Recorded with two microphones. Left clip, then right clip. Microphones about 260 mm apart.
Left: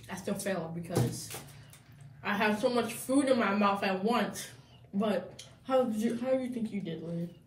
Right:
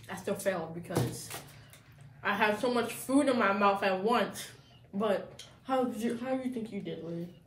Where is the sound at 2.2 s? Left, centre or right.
Centre.